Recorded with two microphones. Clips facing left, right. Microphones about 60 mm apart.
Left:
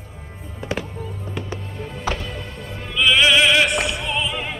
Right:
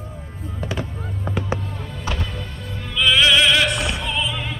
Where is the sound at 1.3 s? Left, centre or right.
Right.